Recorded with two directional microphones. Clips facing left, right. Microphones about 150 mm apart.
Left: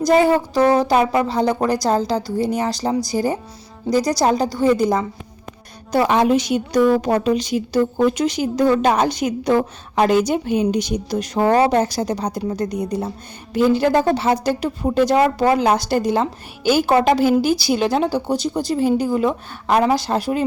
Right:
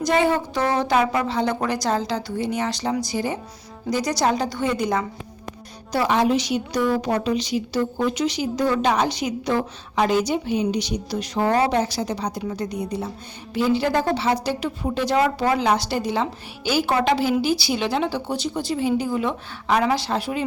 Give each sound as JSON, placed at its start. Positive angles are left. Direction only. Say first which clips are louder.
{"t": 0.0, "sound": "a woman's voice", "louder": "left 5 dB", "side_deg": 35}
{"t": 5.9, "sound": "a woman's voice", "louder": "left 4 dB", "side_deg": 55}